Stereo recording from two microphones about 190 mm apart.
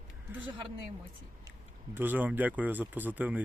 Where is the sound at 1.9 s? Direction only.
10° right (ahead or behind).